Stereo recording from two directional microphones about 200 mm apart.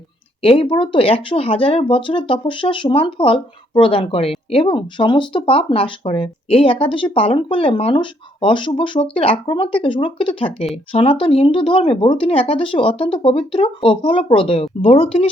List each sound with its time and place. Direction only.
0.4 s speech: 30° left (ahead or behind)